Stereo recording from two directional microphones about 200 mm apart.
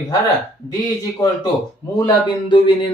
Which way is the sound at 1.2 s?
15° left (ahead or behind).